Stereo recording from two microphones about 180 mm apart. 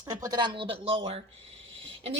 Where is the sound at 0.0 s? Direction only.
20° right (ahead or behind).